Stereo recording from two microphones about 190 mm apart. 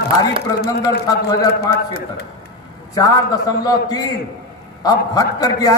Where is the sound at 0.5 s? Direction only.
55° left (ahead or behind).